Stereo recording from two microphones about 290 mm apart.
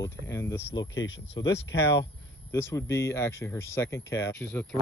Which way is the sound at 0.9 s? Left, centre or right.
Left.